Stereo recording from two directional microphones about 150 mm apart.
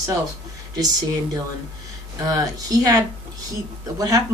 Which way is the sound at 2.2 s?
25° right (ahead or behind).